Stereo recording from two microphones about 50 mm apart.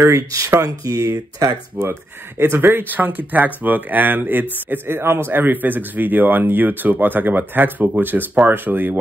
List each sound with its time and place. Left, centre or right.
0.0 s speech: right
1.9 s speech: right
2.9 s a man's voice: right